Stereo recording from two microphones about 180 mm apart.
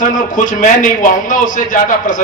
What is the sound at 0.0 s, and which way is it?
A man's voice, 45° left (ahead or behind).